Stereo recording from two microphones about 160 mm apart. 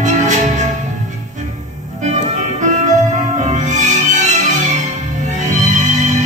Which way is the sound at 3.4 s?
50° right (ahead or behind).